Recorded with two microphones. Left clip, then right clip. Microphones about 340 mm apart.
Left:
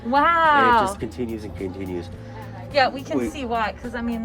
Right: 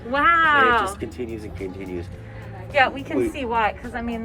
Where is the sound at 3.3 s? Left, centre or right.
Centre.